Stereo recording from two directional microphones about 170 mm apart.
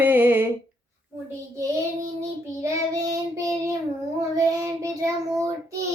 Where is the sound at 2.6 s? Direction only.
20° right (ahead or behind).